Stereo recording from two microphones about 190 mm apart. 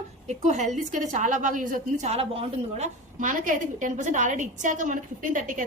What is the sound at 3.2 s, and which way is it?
A woman's voice, 45° right (ahead or behind).